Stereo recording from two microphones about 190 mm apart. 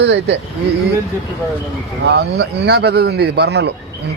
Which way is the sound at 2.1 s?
60° right (ahead or behind).